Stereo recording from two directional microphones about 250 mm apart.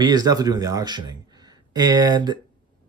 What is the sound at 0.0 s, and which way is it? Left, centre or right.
Speech, centre.